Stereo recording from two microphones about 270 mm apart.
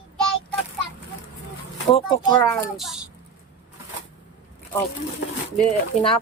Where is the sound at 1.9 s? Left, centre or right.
Centre.